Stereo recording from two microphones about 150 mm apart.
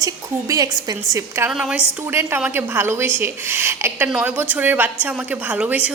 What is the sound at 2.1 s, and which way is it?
A woman's voice, 15° right (ahead or behind).